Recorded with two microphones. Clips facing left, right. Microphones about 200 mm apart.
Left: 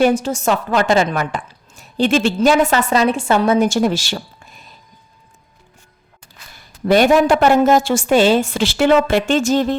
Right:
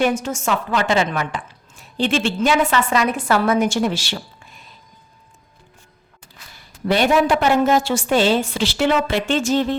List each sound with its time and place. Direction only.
0.0 s a woman's voice: 35° left (ahead or behind)
3.7 s a woman's voice: 40° left (ahead or behind)
6.8 s a woman's voice: 45° left (ahead or behind)